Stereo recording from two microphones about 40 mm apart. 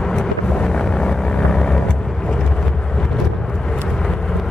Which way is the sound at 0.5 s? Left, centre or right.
Left.